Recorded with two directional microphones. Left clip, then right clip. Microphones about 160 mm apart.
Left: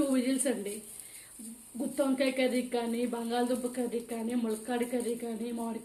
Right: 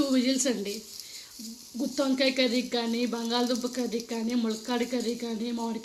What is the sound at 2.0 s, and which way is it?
Speech, 50° right (ahead or behind).